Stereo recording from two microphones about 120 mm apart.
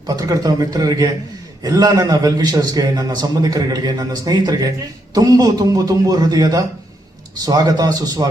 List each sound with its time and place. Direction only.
0.1 s a man's voice: 30° right (ahead or behind)